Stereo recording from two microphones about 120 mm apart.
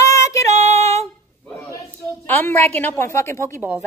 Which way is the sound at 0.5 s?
65° right (ahead or behind).